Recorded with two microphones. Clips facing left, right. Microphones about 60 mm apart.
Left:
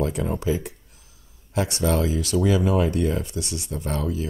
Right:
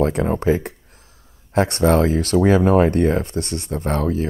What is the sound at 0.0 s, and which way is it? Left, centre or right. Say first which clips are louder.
Speech: right 6 dB; right.